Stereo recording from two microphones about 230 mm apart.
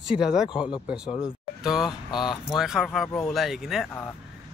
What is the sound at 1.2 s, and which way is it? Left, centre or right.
Music, centre.